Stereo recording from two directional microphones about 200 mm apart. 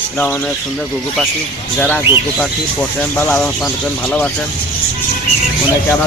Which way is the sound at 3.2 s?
5° left (ahead or behind).